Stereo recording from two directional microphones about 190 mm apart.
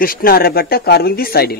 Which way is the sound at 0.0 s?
50° left (ahead or behind).